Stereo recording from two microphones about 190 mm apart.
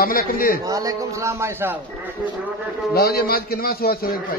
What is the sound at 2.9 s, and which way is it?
A man's voice, 55° left (ahead or behind).